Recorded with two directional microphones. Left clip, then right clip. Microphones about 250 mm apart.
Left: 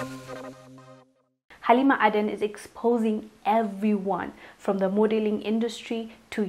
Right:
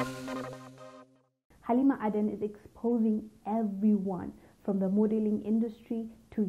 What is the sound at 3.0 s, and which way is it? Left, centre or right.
A woman's voice, centre.